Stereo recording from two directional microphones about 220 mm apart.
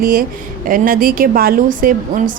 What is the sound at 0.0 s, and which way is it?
A woman's voice, 40° right (ahead or behind).